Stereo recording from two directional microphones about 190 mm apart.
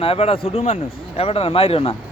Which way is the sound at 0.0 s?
30° left (ahead or behind).